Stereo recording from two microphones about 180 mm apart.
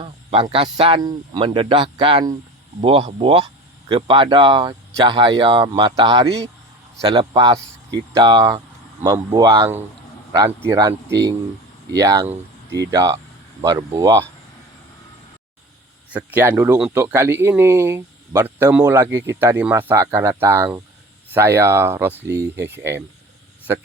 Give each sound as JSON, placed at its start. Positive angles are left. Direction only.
{"t": 0.0, "sound": "speech", "side_deg": -30}
{"t": 11.9, "sound": "speech", "side_deg": -20}
{"t": 16.1, "sound": "speech", "side_deg": -10}